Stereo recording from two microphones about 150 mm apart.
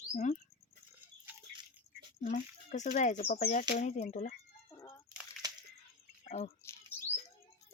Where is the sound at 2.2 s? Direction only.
55° left (ahead or behind).